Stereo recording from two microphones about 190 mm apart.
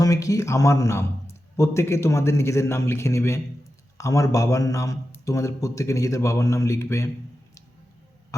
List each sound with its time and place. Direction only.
0.0 s a man's voice: 15° left (ahead or behind)